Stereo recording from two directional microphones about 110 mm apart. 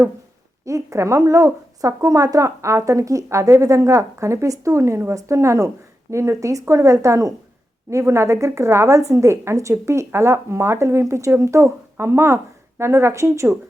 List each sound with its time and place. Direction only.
0.6 s speech: 30° right (ahead or behind)